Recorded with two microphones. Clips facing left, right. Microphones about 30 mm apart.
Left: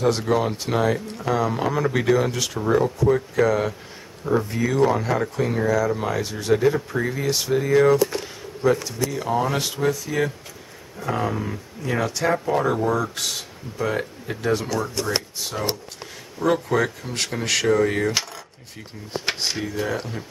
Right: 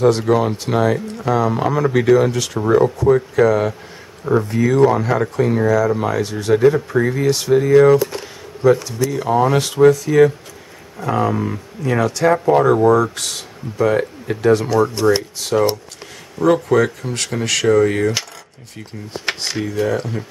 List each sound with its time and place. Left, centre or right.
0.0 s speech: centre
2.6 s speech: centre
8.6 s speech: centre
9.1 s speech: centre
12.9 s speech: centre
14.8 s speech: right
16.3 s speech: centre
19.4 s speech: centre